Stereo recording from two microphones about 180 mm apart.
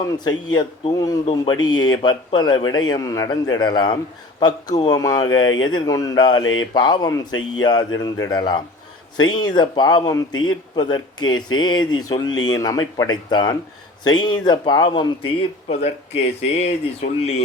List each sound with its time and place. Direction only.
0.3 s speech: 25° left (ahead or behind)
6.4 s mantra: 90° left
6.7 s speech: 25° left (ahead or behind)
15.7 s speech: 40° left (ahead or behind)